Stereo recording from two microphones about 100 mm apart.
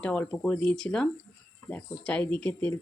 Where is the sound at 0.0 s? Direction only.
15° left (ahead or behind).